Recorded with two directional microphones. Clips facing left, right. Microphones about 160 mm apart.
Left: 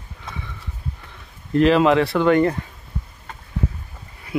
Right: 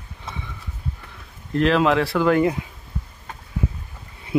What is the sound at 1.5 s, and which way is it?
Speech, centre (ahead or behind).